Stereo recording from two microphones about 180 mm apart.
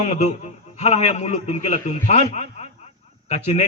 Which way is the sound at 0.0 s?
40° left (ahead or behind).